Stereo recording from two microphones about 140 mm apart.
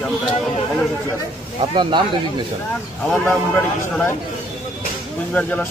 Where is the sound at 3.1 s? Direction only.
5° left (ahead or behind).